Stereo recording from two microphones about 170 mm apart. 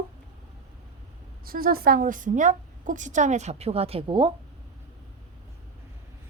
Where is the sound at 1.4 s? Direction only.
60° right (ahead or behind); by 4.3 s 30° right (ahead or behind).